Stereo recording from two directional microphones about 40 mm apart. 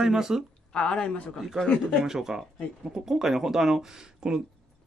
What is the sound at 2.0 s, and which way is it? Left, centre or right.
Speech, centre.